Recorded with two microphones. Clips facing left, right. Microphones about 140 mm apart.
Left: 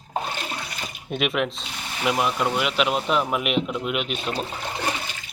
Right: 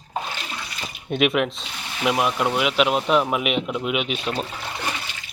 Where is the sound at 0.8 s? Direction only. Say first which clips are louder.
Right 6 dB; centre (ahead or behind).